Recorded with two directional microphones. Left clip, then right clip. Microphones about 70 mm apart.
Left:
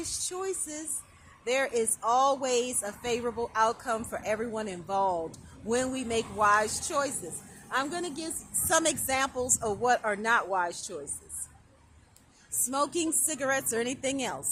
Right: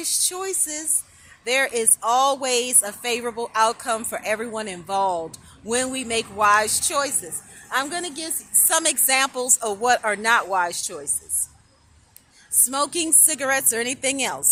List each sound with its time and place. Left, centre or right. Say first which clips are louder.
0.0 s speech: right 8 dB; right
7.7 s a woman's voice: right 6 dB; right
8.6 s speech: right 4 dB; right
12.6 s speech: right 4 dB; right